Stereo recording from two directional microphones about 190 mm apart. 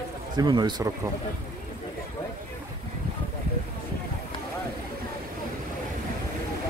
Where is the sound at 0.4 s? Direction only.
20° right (ahead or behind).